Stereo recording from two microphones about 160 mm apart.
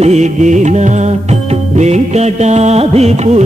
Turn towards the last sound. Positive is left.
turn(degrees=-40)  # may be behind; listen again after turning